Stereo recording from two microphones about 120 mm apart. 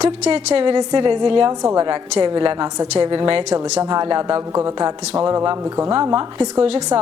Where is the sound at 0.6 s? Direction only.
40° right (ahead or behind).